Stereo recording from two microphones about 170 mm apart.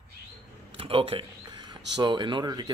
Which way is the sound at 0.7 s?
35° right (ahead or behind).